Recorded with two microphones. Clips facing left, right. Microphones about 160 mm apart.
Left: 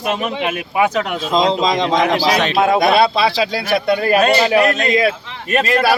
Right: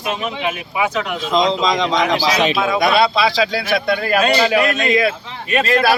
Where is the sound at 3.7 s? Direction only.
35° left (ahead or behind).